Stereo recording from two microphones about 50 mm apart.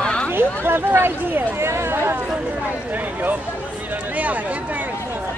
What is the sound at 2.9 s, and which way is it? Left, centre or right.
Speech, right.